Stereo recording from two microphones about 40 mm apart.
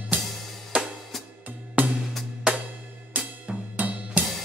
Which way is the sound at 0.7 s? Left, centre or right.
Right.